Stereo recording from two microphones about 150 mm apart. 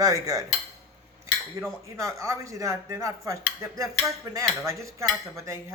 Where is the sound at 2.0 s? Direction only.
20° right (ahead or behind).